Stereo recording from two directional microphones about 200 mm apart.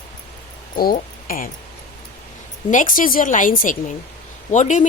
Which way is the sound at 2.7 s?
40° left (ahead or behind).